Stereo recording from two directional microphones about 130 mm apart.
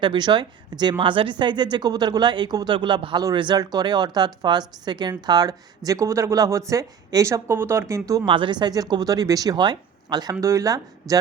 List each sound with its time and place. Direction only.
0.0 s speech: 35° right (ahead or behind)
8.2 s speech: 40° right (ahead or behind)